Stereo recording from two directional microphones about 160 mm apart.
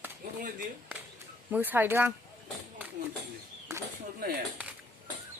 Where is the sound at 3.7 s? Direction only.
20° right (ahead or behind).